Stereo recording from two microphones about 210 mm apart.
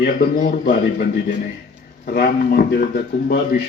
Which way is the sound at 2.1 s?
45° left (ahead or behind).